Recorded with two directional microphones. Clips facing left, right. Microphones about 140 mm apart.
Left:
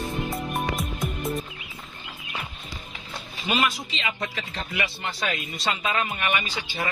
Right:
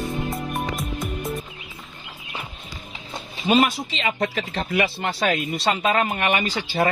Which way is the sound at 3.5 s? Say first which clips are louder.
Right 7 dB; 30° right (ahead or behind).